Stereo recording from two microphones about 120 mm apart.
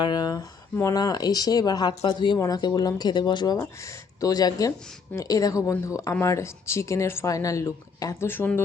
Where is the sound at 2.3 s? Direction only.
30° left (ahead or behind).